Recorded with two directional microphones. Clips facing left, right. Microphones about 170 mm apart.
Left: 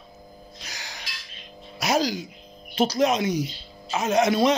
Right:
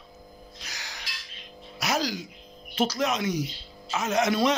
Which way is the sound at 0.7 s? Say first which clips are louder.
Left 2 dB; 30° left (ahead or behind).